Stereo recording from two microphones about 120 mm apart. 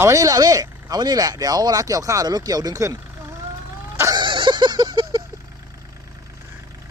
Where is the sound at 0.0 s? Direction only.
25° right (ahead or behind).